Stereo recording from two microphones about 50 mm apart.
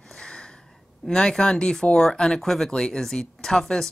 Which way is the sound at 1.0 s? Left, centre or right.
Centre.